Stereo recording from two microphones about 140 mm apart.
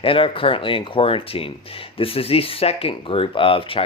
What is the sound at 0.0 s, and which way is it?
Speech, 40° left (ahead or behind).